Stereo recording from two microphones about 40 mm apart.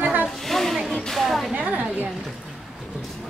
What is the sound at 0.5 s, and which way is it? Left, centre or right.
Speech, centre.